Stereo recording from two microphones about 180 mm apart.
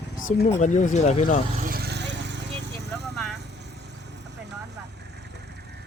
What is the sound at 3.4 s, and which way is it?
Vehicle, 70° right (ahead or behind).